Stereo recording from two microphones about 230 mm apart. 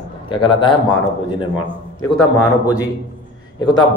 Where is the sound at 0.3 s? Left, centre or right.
Left.